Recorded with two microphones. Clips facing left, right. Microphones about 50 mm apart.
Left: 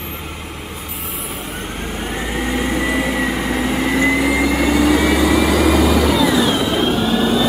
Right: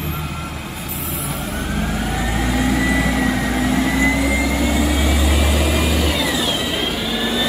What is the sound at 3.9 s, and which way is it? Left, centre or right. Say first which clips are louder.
Vehicle: left 2 dB; left.